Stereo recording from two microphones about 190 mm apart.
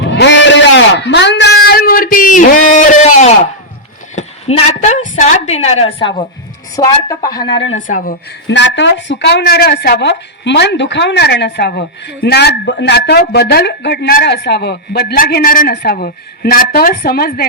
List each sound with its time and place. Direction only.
0.0 s a sound: 65° left (ahead or behind); by 3.5 s 35° left (ahead or behind)
4.1 s a woman's voice: 35° left (ahead or behind)
6.7 s a woman's voice: 20° left (ahead or behind)
7.4 s speech: 70° left (ahead or behind)
7.7 s speech: 40° left (ahead or behind)
8.4 s a woman's voice: 70° left (ahead or behind); by 17.4 s 50° left (ahead or behind)